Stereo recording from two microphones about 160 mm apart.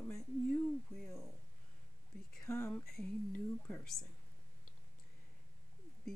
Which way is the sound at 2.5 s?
15° left (ahead or behind).